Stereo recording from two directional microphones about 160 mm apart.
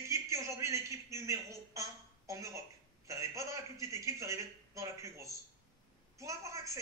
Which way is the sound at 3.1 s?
20° right (ahead or behind).